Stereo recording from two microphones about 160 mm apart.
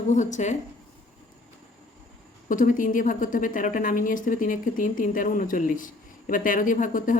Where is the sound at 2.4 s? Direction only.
55° left (ahead or behind).